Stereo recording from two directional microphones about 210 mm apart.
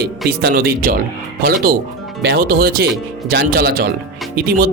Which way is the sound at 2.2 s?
45° right (ahead or behind).